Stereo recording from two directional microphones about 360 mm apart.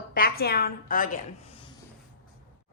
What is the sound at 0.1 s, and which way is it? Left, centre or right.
A woman's voice, left.